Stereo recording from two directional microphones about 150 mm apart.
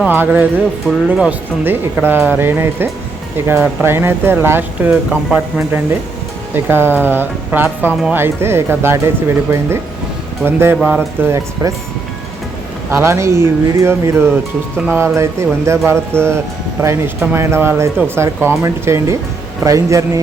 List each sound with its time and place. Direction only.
0.0 s speech: 10° right (ahead or behind)
12.9 s a man's voice: 15° right (ahead or behind)